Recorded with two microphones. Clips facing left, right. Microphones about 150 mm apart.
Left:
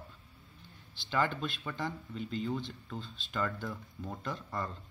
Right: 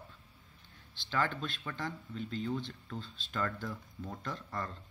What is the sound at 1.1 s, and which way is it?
Speech, 5° left (ahead or behind).